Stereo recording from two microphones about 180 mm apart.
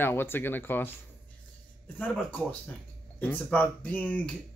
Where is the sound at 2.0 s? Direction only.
10° left (ahead or behind).